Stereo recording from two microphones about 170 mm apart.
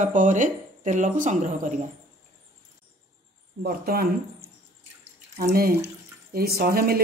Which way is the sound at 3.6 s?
60° right (ahead or behind).